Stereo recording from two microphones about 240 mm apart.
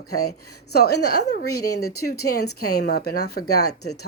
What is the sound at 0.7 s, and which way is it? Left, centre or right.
A woman's voice, left.